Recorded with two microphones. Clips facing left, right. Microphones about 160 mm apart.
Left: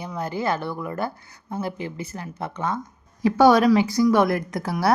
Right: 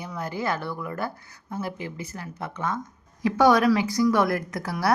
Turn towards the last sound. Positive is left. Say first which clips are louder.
# left 3 dB
turn(degrees=25)  # may be behind; listen again after turning